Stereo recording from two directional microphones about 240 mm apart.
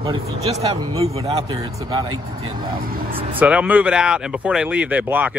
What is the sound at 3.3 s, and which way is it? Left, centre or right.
Speech, centre.